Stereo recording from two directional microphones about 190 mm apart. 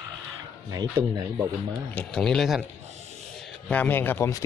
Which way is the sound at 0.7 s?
20° right (ahead or behind).